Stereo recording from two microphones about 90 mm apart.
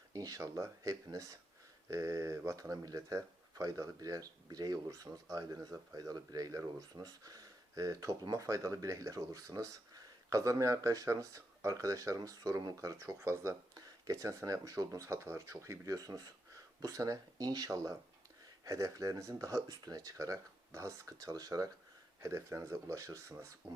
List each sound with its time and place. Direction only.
0.1 s speech: 40° right (ahead or behind)
22.2 s speech: 30° right (ahead or behind)